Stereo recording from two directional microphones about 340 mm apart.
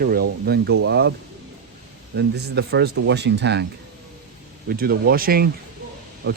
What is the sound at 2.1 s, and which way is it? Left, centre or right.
Speech, right.